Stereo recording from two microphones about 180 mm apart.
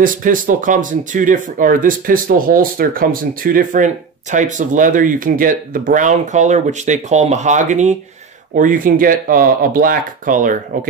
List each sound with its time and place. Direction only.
0.0 s speech: 50° right (ahead or behind)